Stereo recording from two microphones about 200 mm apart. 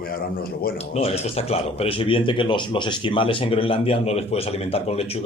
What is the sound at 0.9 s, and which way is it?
Speech, 30° left (ahead or behind).